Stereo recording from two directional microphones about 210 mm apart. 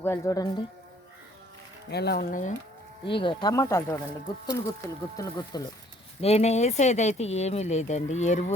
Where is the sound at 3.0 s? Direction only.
25° left (ahead or behind).